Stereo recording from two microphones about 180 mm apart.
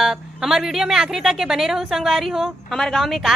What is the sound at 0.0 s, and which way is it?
Speech, centre (ahead or behind).